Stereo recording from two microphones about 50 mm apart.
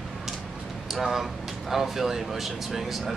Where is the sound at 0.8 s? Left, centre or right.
Centre.